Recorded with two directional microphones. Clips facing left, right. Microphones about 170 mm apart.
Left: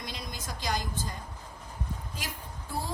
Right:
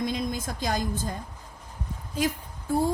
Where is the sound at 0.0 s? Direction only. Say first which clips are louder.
Right 12 dB; 50° right (ahead or behind).